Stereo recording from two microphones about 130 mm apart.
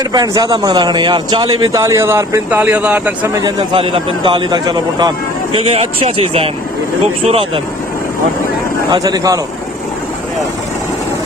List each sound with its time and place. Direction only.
0.1 s a man's voice: 30° right (ahead or behind); by 3.0 s 10° right (ahead or behind)
3.3 s a man's voice: 30° right (ahead or behind)
3.8 s speech: 45° right (ahead or behind)
8.9 s a man's voice: 30° right (ahead or behind)